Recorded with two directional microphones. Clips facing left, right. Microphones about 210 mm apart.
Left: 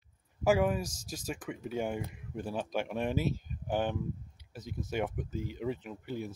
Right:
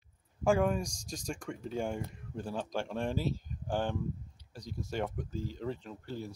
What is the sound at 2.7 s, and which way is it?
Speech, 20° left (ahead or behind).